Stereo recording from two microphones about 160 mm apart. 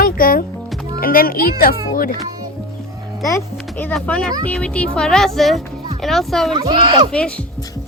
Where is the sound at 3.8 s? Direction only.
10° left (ahead or behind).